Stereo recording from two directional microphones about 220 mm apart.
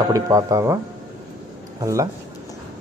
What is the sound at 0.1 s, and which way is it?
Speech, 15° right (ahead or behind).